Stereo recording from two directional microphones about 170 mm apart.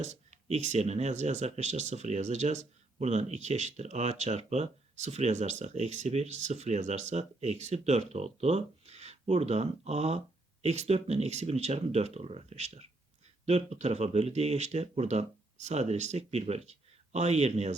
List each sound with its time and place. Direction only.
0.0 s speech: 40° right (ahead or behind)